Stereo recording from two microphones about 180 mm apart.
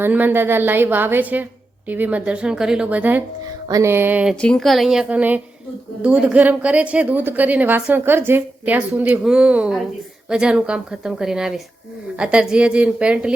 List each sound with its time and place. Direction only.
0.0 s a woman's voice: 10° right (ahead or behind)
3.4 s music: 20° right (ahead or behind)
4.4 s a woman's voice: 5° left (ahead or behind)